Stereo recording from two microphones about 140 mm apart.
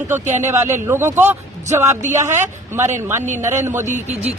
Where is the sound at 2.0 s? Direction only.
60° right (ahead or behind).